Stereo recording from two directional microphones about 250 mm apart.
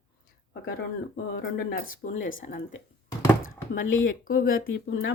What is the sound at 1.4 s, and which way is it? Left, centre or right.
A woman's voice, left.